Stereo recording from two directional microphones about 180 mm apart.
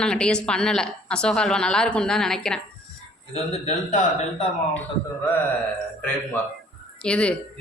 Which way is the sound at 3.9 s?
40° left (ahead or behind).